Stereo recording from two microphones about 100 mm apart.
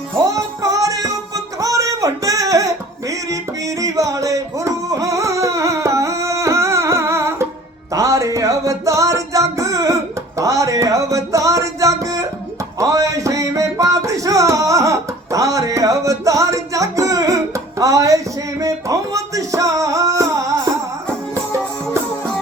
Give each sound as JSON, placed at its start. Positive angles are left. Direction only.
{"t": 0.3, "sound": "music", "side_deg": -35}